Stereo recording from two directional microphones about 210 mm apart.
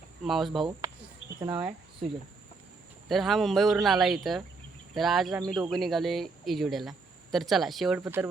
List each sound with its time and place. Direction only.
0.3 s speech: centre (ahead or behind)
1.4 s speech: 20° right (ahead or behind)
3.1 s speech: centre (ahead or behind)
8.0 s speech: 10° right (ahead or behind)